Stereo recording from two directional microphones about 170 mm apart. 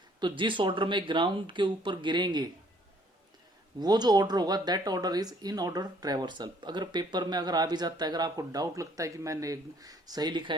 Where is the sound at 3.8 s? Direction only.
25° right (ahead or behind).